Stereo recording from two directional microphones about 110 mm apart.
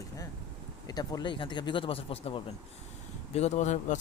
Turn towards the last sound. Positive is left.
turn(degrees=90)